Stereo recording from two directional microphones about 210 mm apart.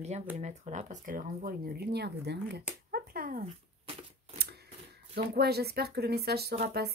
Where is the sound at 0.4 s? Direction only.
35° right (ahead or behind).